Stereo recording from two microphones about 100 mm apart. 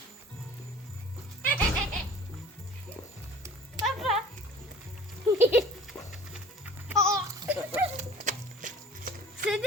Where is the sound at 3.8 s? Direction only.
Centre (ahead or behind).